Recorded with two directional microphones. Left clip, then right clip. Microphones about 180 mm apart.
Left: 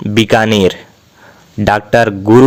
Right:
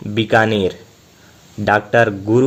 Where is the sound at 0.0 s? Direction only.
30° left (ahead or behind).